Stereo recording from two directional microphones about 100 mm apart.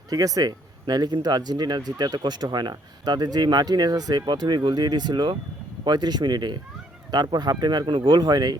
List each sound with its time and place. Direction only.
0.1 s speech: 35° right (ahead or behind)